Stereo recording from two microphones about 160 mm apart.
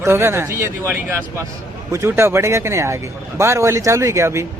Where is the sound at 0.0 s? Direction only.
15° right (ahead or behind).